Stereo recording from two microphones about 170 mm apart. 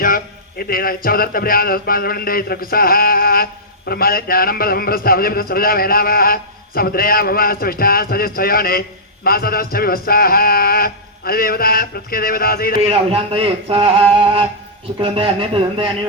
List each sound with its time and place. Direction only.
0.6 s a man's voice: 60° left (ahead or behind)
12.8 s speech: 35° right (ahead or behind)